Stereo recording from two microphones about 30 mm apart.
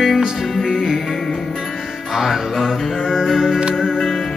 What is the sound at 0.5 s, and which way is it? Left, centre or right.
Music, centre.